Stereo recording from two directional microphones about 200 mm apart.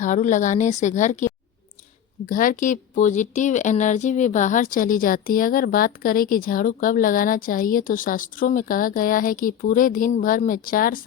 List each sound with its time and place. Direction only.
0.0 s a woman's voice: 40° left (ahead or behind)